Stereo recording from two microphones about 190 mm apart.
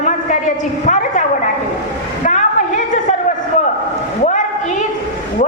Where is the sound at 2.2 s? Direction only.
40° left (ahead or behind).